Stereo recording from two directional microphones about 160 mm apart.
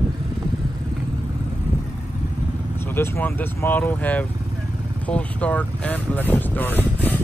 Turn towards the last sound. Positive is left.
turn(degrees=10)  # may be behind; listen again after turning